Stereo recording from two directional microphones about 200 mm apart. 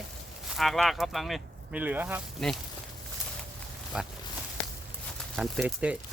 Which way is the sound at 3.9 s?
5° right (ahead or behind).